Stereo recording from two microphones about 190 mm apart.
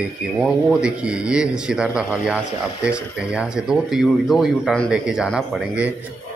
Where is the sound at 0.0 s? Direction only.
Centre (ahead or behind).